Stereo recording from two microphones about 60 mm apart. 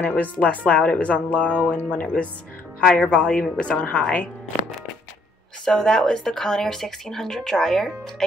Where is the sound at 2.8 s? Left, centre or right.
Centre.